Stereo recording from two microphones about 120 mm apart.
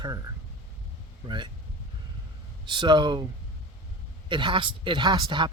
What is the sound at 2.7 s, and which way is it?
Speech, 40° right (ahead or behind).